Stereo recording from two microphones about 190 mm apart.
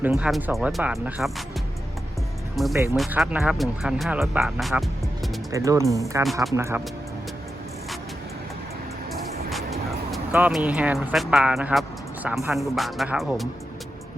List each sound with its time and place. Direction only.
0.0 s speech: 5° right (ahead or behind)
2.6 s speech: centre (ahead or behind)
5.5 s speech: 15° right (ahead or behind)
10.1 s speech: 5° right (ahead or behind)